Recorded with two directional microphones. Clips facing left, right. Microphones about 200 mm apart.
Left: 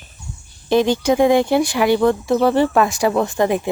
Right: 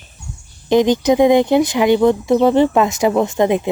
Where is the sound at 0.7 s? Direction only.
15° right (ahead or behind).